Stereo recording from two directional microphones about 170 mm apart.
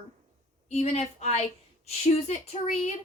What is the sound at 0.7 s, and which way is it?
A woman's voice, 40° left (ahead or behind).